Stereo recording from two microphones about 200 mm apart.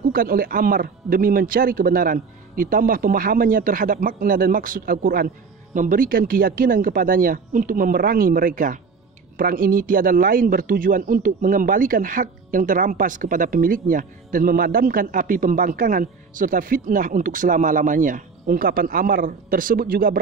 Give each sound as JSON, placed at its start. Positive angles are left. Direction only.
{"t": 0.1, "sound": "speech", "side_deg": -45}